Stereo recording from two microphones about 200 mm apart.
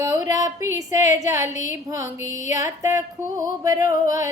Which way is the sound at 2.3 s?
35° left (ahead or behind).